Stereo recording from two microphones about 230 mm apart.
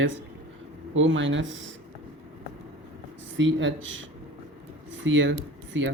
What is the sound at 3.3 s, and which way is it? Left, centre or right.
Speech, right.